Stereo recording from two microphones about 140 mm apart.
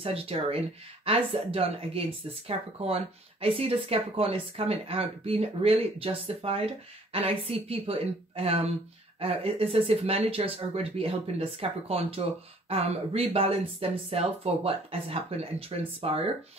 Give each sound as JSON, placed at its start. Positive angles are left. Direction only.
{"t": 0.0, "sound": "speech", "side_deg": -45}